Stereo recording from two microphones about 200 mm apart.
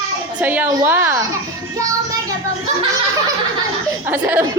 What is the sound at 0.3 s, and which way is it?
Speech, 10° right (ahead or behind).